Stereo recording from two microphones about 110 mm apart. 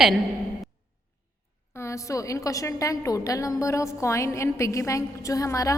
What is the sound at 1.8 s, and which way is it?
A woman's voice, 30° left (ahead or behind).